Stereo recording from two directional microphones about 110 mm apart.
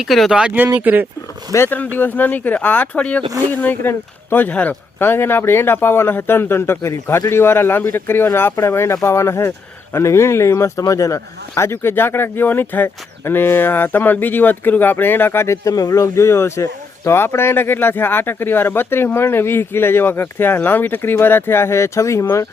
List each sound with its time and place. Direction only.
0.0 s speech: centre (ahead or behind)
1.5 s speech: 20° left (ahead or behind)